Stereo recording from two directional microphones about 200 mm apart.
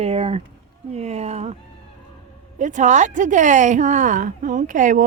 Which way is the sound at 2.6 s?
40° right (ahead or behind).